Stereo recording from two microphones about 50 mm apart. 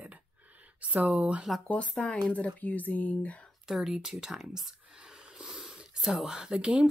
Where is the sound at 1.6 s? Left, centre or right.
Left.